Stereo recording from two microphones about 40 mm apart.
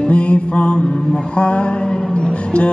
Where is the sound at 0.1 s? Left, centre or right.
Left.